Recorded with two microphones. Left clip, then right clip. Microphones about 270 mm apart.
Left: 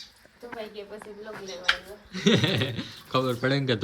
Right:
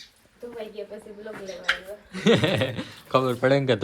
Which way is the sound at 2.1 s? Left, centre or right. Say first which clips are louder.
Right 3 dB; centre.